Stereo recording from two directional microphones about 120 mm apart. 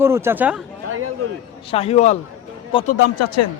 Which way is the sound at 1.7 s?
60° left (ahead or behind).